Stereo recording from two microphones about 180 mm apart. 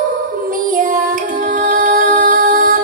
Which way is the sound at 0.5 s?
50° right (ahead or behind).